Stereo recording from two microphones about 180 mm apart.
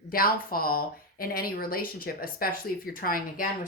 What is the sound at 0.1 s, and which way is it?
Speech, 55° left (ahead or behind).